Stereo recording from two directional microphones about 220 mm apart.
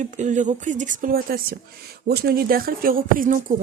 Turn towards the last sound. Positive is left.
turn(degrees=-35)  # may be behind; listen again after turning